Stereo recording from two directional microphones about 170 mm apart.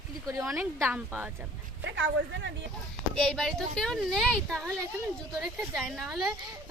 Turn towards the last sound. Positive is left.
turn(degrees=0)  # may be behind; listen again after turning